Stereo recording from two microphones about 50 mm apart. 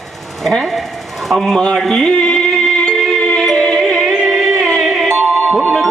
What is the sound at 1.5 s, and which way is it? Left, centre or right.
Music, centre.